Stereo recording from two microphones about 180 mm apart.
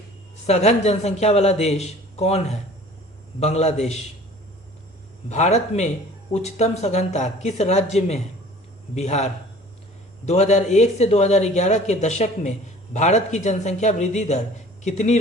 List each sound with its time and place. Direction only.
0.4 s speech: 35° left (ahead or behind)
5.3 s speech: 40° left (ahead or behind)